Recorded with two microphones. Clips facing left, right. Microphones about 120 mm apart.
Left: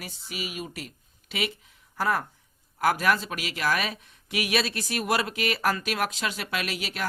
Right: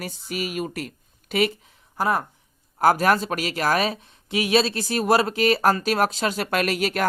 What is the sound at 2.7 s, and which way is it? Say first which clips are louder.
Speech: right 5 dB; 35° right (ahead or behind).